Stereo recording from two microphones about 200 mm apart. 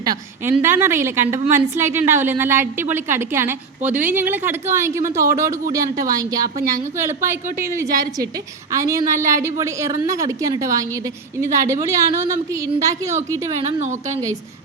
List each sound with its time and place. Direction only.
0.0 s a woman's voice: 20° right (ahead or behind)
13.7 s a woman's voice: 35° right (ahead or behind)